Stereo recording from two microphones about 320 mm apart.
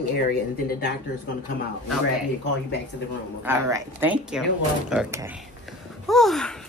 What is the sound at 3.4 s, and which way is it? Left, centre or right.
A woman's voice, centre.